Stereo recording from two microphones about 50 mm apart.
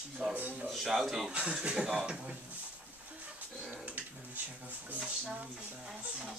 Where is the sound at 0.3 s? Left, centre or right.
Right.